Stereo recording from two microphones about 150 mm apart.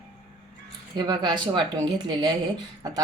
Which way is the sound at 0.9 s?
30° right (ahead or behind).